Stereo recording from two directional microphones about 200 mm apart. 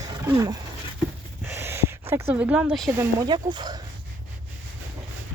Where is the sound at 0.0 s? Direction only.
15° right (ahead or behind).